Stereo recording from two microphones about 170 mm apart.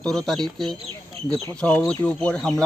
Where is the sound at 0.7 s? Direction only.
35° right (ahead or behind).